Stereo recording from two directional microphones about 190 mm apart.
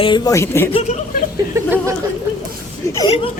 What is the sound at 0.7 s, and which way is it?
Speech, 30° left (ahead or behind).